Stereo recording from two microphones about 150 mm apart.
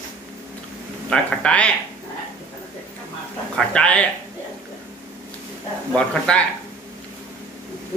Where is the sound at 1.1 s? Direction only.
5° left (ahead or behind).